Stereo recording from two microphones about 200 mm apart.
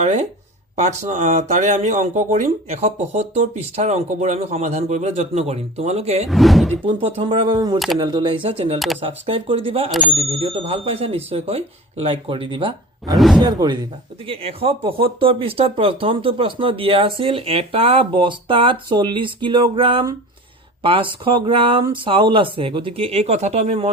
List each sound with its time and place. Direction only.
0.0 s speech: 35° right (ahead or behind)
6.2 s speech: centre (ahead or behind)
6.8 s speech: 25° right (ahead or behind)
13.1 s speech: centre (ahead or behind)
13.4 s speech: 20° right (ahead or behind)